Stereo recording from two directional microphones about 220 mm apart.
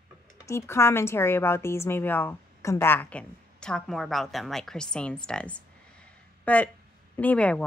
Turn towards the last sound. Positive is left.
turn(degrees=5)  # may be behind; listen again after turning